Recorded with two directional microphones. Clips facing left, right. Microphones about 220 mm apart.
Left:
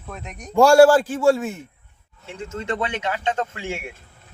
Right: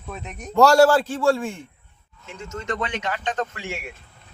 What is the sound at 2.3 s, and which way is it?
Speech, 30° left (ahead or behind).